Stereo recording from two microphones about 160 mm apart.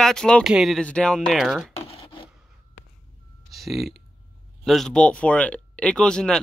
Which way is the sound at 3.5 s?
Centre (ahead or behind).